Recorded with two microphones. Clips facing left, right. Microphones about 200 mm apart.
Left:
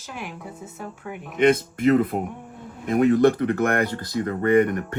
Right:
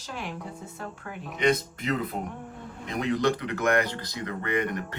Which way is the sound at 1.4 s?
55° left (ahead or behind).